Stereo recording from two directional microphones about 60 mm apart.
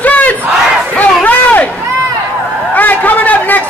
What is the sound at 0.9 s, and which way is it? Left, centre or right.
Crowd, left.